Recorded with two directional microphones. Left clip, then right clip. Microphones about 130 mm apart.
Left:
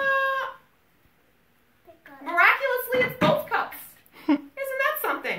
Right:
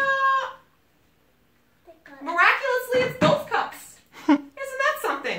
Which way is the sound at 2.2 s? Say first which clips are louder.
Even; 20° left (ahead or behind).